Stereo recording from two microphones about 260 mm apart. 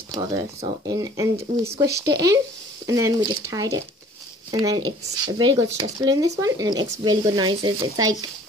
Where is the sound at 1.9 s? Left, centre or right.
Right.